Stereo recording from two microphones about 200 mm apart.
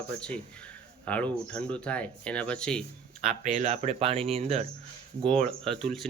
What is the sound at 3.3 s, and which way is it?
Speech, 35° right (ahead or behind).